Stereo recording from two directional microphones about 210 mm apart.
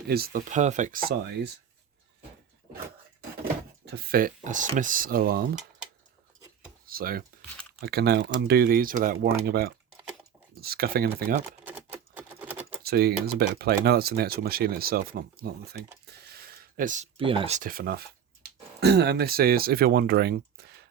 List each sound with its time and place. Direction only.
0.1 s speech: 45° right (ahead or behind)
3.4 s speech: 50° right (ahead or behind)
6.8 s speech: 45° right (ahead or behind)
11.6 s typing: 5° right (ahead or behind)
12.8 s speech: 50° right (ahead or behind)